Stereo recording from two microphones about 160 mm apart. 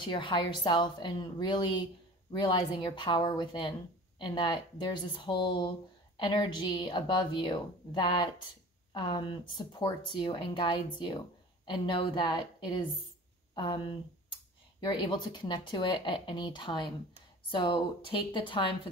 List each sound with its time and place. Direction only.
0.0 s speech: 30° left (ahead or behind)